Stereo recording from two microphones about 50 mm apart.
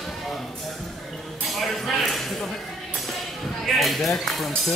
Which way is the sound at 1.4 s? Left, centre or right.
Centre.